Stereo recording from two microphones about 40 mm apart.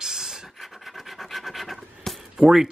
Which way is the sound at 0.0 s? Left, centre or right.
Centre.